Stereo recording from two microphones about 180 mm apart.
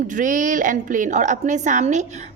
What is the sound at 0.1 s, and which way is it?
A woman's voice, 45° right (ahead or behind).